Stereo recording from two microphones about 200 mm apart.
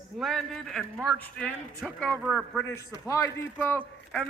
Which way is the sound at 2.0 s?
5° right (ahead or behind).